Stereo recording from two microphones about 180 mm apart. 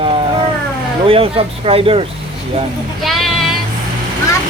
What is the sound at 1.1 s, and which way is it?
Speech, 30° right (ahead or behind).